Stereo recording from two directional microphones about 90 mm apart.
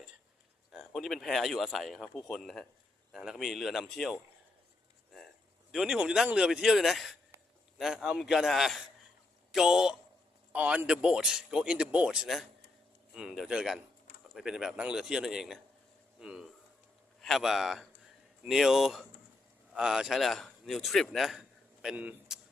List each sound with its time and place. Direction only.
0.7 s speech: centre (ahead or behind)
5.7 s speech: 5° right (ahead or behind)
10.5 s a man's voice: 15° right (ahead or behind)
16.2 s a sound: 5° right (ahead or behind)
17.2 s a man's voice: centre (ahead or behind)
22.3 s a sound: 5° right (ahead or behind)